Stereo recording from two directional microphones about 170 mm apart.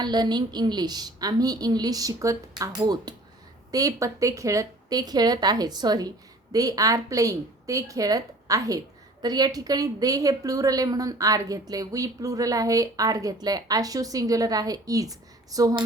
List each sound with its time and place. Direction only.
0.0 s a woman's voice: 25° right (ahead or behind)